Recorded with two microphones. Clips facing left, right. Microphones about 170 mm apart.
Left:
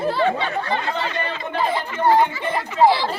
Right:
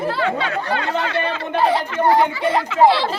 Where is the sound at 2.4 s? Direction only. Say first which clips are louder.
Right 3 dB; 90° right.